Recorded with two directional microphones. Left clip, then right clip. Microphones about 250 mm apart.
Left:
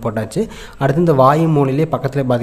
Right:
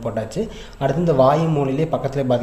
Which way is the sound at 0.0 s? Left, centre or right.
Left.